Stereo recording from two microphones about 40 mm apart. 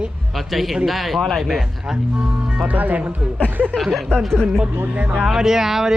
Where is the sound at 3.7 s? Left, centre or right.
Centre.